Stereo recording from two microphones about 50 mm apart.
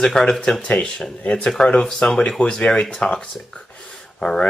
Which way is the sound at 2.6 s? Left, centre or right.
Left.